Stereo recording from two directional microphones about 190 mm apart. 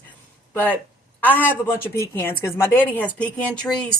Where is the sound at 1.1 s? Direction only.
10° left (ahead or behind).